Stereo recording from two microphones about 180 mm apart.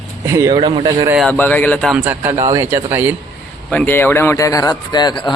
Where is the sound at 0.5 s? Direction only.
25° right (ahead or behind).